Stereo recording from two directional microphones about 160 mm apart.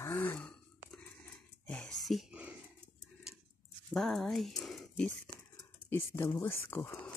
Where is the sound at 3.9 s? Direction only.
Centre (ahead or behind).